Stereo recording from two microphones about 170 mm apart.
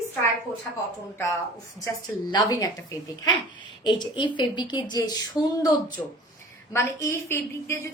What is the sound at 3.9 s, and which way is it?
A woman's voice, 25° left (ahead or behind).